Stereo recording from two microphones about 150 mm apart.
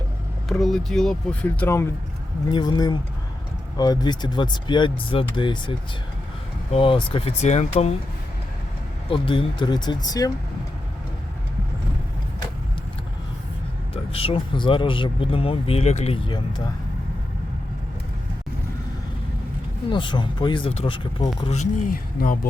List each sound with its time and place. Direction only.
0.4 s speech: centre (ahead or behind)
2.5 s speech: 30° left (ahead or behind); by 7.9 s 45° left (ahead or behind)
9.0 s speech: 35° left (ahead or behind)
13.9 s speech: 40° left (ahead or behind)
19.9 s speech: 30° left (ahead or behind)
21.4 s speech: 50° left (ahead or behind); by 22.4 s 70° left (ahead or behind)